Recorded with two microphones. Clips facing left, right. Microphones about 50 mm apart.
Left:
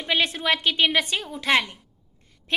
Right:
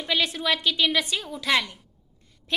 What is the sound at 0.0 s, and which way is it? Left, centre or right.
A woman's voice, left.